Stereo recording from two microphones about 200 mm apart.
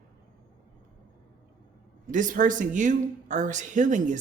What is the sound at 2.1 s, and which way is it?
Speech, 40° right (ahead or behind).